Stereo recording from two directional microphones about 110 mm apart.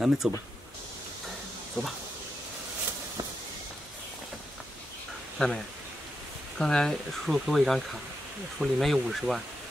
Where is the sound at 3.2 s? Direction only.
35° right (ahead or behind).